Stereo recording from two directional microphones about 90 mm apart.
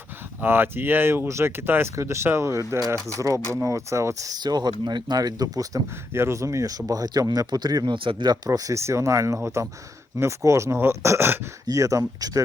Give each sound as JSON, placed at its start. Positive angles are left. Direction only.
{"t": 0.4, "sound": "speech", "side_deg": -25}
{"t": 6.1, "sound": "speech", "side_deg": -30}
{"t": 7.9, "sound": "speech", "side_deg": -60}
{"t": 8.4, "sound": "speech", "side_deg": -40}